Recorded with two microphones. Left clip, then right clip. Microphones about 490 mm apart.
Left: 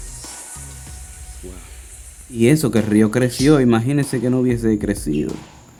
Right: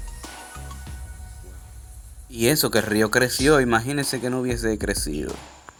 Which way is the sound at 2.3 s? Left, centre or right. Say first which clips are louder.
Left 4 dB; right.